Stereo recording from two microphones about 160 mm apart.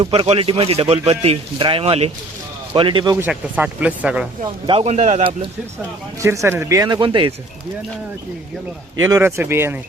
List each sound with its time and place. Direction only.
0.0 s speech: 35° right (ahead or behind)
3.2 s speech: 10° right (ahead or behind)
4.6 s speech: 35° right (ahead or behind)
6.2 s speech: 15° right (ahead or behind)
9.0 s speech: 15° right (ahead or behind)